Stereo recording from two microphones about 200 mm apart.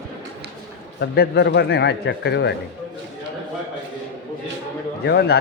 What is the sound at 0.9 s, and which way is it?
A man's voice, 55° left (ahead or behind).